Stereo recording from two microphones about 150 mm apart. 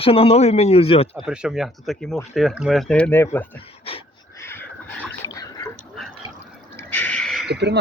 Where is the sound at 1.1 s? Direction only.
5° right (ahead or behind); by 3.4 s 15° left (ahead or behind).